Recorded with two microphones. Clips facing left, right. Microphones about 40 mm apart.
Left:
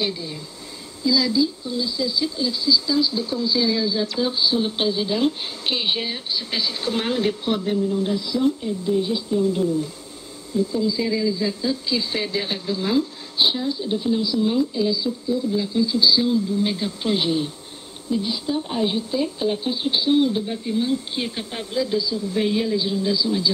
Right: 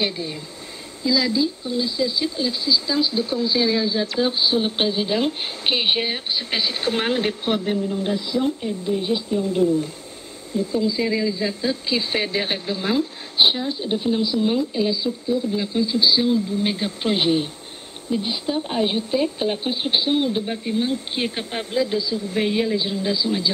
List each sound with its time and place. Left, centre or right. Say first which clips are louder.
0.1 s speech: right 2 dB; right
10.8 s speech: right 1 dB; right